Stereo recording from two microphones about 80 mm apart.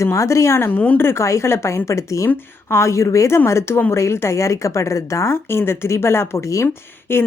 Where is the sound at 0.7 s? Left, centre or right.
Left.